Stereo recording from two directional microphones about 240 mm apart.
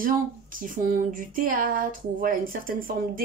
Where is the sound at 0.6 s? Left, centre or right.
Right.